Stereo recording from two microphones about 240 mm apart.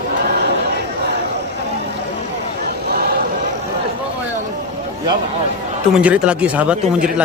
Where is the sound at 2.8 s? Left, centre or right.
Right.